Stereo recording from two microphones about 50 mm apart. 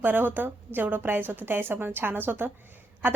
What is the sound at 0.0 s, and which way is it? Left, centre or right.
A woman's voice, right.